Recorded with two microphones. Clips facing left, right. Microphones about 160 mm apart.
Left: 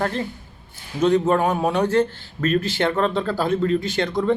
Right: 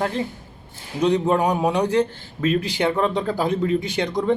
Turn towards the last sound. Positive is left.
turn(degrees=-15)  # may be behind; listen again after turning